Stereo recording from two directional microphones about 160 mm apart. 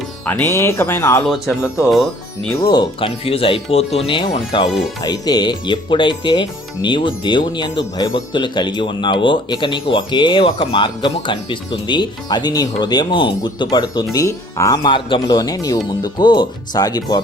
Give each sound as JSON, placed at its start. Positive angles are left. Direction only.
{"t": 0.3, "sound": "speech", "side_deg": 15}
{"t": 1.3, "sound": "speech", "side_deg": 0}
{"t": 2.6, "sound": "speech", "side_deg": 30}